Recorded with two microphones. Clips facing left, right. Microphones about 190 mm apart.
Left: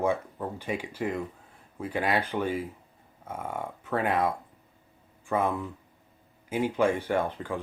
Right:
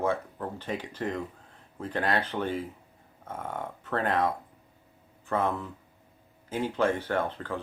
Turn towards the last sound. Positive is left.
turn(degrees=10)  # may be behind; listen again after turning